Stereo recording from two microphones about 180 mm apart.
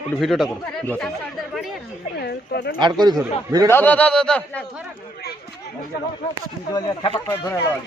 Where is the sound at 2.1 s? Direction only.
65° left (ahead or behind).